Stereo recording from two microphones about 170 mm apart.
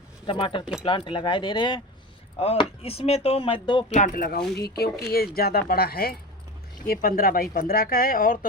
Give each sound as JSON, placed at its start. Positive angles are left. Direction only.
{"t": 0.3, "sound": "speech", "side_deg": 30}
{"t": 0.6, "sound": "speech", "side_deg": 0}
{"t": 0.9, "sound": "speech", "side_deg": 30}
{"t": 3.9, "sound": "speech", "side_deg": 50}